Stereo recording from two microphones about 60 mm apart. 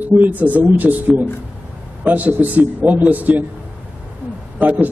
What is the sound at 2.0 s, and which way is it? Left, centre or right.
A man's voice, right.